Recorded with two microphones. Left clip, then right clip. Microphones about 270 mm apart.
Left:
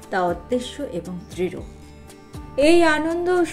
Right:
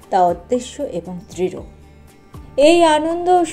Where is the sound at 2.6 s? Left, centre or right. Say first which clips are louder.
Right 5 dB; centre.